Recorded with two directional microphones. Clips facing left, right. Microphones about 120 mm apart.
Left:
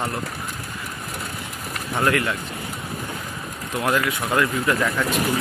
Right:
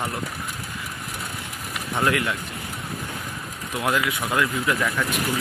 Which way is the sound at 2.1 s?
5° right (ahead or behind).